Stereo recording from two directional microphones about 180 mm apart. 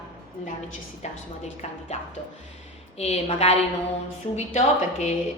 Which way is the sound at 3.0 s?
35° left (ahead or behind).